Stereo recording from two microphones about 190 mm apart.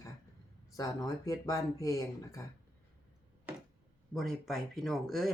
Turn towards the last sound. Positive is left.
turn(degrees=0)  # may be behind; listen again after turning